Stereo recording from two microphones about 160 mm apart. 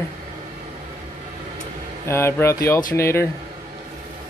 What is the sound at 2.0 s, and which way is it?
Speech, 15° left (ahead or behind).